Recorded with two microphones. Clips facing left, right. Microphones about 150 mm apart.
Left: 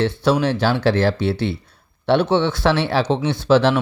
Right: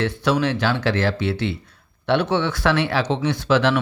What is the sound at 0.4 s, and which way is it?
Speech, 30° left (ahead or behind).